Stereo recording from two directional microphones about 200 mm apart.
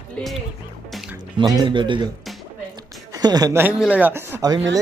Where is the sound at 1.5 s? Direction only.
25° right (ahead or behind).